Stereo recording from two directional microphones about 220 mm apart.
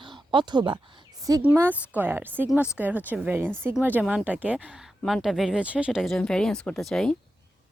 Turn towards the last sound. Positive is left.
turn(degrees=5)  # may be behind; listen again after turning